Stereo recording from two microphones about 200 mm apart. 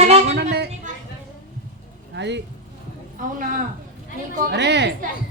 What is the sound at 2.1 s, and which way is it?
Speech, 60° right (ahead or behind).